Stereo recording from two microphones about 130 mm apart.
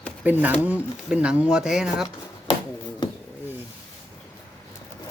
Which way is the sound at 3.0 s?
35° left (ahead or behind).